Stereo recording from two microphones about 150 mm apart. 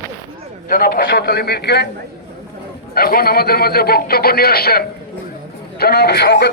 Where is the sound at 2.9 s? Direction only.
90° left.